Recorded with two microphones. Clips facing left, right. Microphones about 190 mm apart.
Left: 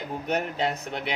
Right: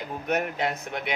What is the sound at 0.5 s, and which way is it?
Speech, 30° left (ahead or behind).